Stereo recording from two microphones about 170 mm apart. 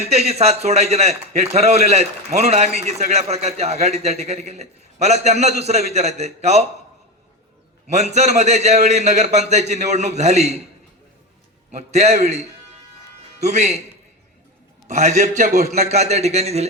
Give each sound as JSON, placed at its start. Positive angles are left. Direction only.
{"t": 0.0, "sound": "a man's voice", "side_deg": -40}
{"t": 7.9, "sound": "a man's voice", "side_deg": -40}
{"t": 11.7, "sound": "a man's voice", "side_deg": -40}
{"t": 14.8, "sound": "a man's voice", "side_deg": -45}